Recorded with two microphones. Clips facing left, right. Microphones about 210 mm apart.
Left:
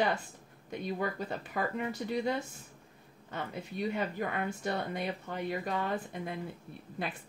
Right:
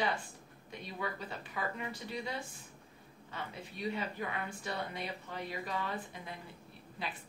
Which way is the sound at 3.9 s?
50° left (ahead or behind).